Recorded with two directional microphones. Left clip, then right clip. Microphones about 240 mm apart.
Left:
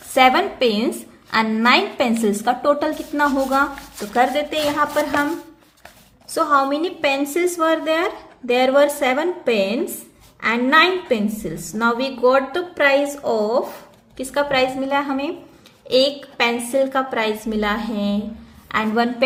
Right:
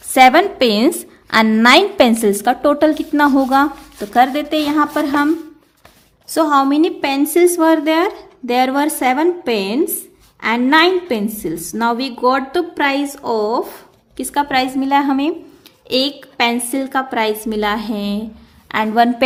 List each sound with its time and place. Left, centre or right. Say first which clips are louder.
0.1 s a woman's voice: right 5 dB; right
6.3 s a woman's voice: right 4 dB; right